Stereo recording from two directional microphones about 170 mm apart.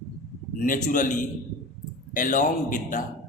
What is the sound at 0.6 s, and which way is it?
A man's voice, 50° left (ahead or behind).